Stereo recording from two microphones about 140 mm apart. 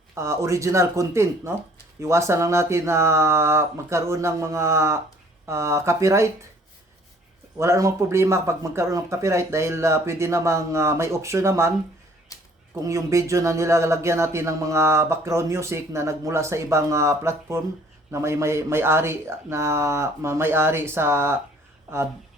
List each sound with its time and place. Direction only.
0.1 s speech: 20° right (ahead or behind)
7.6 s speech: 20° right (ahead or behind)
12.3 s a sound: 25° left (ahead or behind)
12.8 s speech: 20° right (ahead or behind)